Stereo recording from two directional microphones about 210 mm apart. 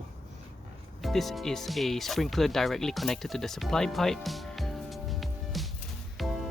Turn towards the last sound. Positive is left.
turn(degrees=0)  # may be behind; listen again after turning